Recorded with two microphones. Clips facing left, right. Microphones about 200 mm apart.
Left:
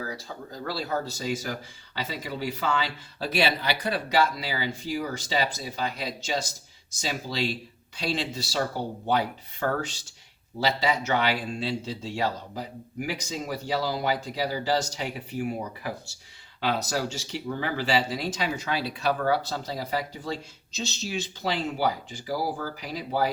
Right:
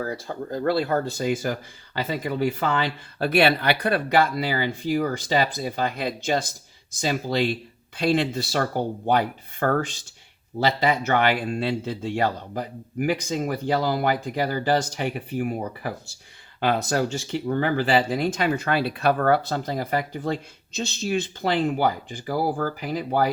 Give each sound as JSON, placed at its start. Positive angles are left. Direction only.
{"t": 0.0, "sound": "speech", "side_deg": -55}